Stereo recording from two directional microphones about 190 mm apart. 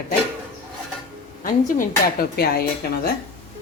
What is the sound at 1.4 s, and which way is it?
Speech, 50° left (ahead or behind).